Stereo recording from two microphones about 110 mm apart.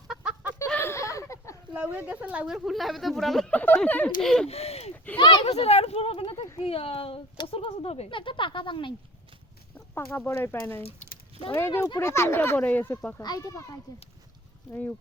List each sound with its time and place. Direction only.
0.7 s a sound: 20° left (ahead or behind)
1.7 s speech: 15° right (ahead or behind); by 3.5 s centre (ahead or behind)
3.5 s speech: 15° left (ahead or behind)
4.2 s speech: 5° left (ahead or behind)
4.4 s speech: 70° left (ahead or behind)
5.1 s speech: 50° left (ahead or behind)
5.5 s speech: 70° left (ahead or behind)
8.1 s speech: 50° left (ahead or behind)
9.7 s speech: 15° left (ahead or behind)
10.8 s a sound: 60° left (ahead or behind)
11.5 s a child's voice: 25° left (ahead or behind)
13.2 s a child's voice: 35° left (ahead or behind)
14.7 s speech: 15° left (ahead or behind)